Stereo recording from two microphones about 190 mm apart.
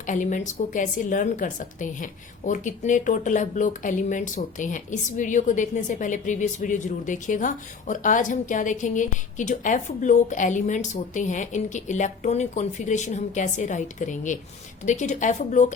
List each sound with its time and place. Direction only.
0.0 s a woman's voice: 40° left (ahead or behind)